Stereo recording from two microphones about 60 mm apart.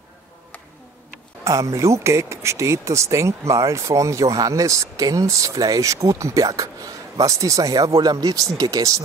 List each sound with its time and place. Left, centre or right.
1.4 s speech: right